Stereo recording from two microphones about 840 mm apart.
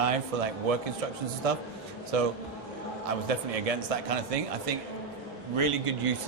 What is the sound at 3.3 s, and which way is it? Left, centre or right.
A man's voice, right.